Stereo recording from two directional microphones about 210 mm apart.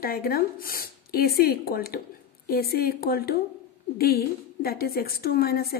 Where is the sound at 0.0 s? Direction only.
45° left (ahead or behind).